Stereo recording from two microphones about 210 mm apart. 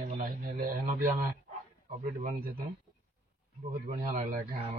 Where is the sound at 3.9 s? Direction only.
40° right (ahead or behind).